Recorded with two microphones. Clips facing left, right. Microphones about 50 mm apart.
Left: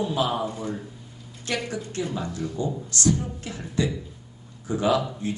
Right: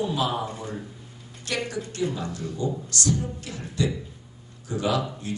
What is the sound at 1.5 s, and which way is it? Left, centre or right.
A man's voice, left.